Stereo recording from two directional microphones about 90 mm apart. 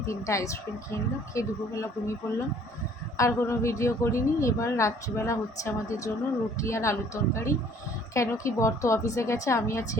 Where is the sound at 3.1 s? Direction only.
35° left (ahead or behind).